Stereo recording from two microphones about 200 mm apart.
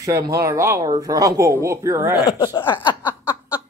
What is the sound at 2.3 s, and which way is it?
Speech, 15° left (ahead or behind).